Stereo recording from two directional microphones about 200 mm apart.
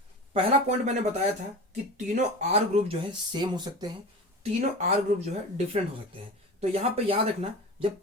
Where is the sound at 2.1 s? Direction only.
35° right (ahead or behind).